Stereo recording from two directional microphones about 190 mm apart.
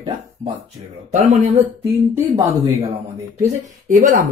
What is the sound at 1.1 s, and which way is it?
Speech, 35° right (ahead or behind).